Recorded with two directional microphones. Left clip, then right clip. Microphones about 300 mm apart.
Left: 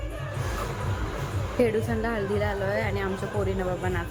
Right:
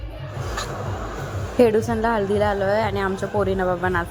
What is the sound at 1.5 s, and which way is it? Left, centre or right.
A woman's voice, centre.